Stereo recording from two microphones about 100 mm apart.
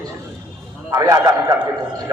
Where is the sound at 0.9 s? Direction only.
35° right (ahead or behind).